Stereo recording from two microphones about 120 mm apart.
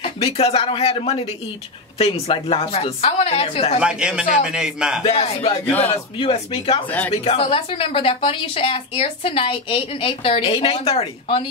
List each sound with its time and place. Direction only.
0.0 s a woman's voice: 60° left (ahead or behind)
3.8 s a man's voice: 10° right (ahead or behind)
5.0 s a woman's voice: 55° left (ahead or behind)